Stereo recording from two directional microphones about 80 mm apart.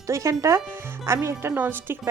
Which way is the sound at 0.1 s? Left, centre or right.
Right.